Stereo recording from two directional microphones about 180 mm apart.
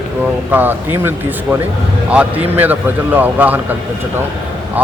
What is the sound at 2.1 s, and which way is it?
A man's voice, 10° right (ahead or behind).